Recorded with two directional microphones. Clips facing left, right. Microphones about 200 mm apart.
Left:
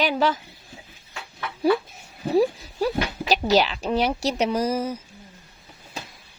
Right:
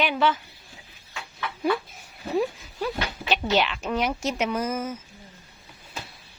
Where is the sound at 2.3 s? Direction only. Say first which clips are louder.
Left 5 dB; 35° left (ahead or behind).